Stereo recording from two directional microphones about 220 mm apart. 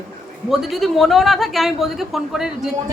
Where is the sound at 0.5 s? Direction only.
Centre (ahead or behind).